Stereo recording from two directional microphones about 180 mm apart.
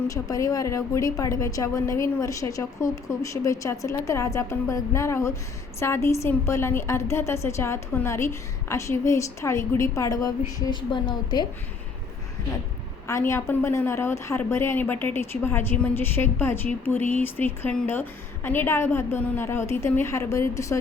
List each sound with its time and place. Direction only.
0.1 s a woman's voice: 20° left (ahead or behind)
13.1 s a woman's voice: 15° left (ahead or behind)